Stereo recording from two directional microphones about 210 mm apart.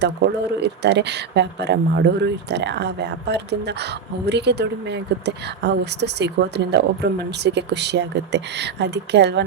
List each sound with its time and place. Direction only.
0.6 s a woman's voice: 55° right (ahead or behind)